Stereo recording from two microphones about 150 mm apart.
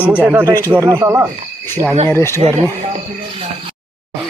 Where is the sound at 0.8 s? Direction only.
20° right (ahead or behind).